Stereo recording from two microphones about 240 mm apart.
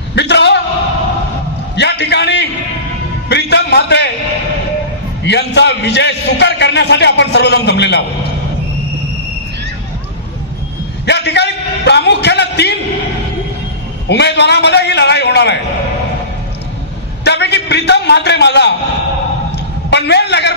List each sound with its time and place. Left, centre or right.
0.1 s a sound: left
1.8 s a sound: left
3.3 s music: left
5.2 s a man's voice: left
11.1 s a man's voice: left
14.0 s a man's voice: left
17.2 s a man's voice: left
19.9 s a man's voice: left